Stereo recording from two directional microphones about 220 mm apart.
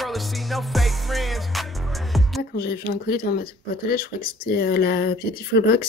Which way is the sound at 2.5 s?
45° left (ahead or behind).